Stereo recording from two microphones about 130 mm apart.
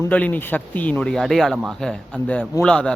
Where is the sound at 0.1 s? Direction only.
10° left (ahead or behind).